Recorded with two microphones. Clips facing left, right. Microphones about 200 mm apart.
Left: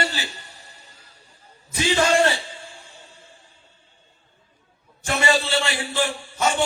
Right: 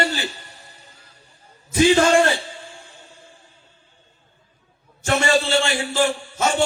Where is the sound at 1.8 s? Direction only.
50° right (ahead or behind).